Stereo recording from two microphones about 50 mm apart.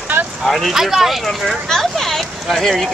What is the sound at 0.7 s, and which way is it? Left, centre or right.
Speech, centre.